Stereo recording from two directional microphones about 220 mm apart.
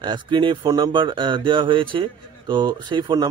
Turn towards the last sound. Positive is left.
turn(degrees=-20)  # may be behind; listen again after turning